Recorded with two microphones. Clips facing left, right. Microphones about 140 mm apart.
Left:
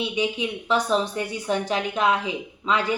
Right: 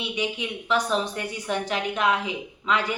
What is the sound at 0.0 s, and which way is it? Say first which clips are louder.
A woman's voice: left 4 dB; 30° left (ahead or behind).